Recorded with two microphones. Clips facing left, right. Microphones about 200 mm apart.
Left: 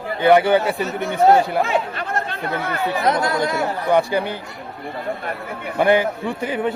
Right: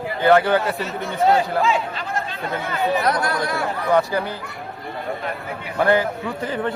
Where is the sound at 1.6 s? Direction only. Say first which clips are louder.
Even; 60° left (ahead or behind).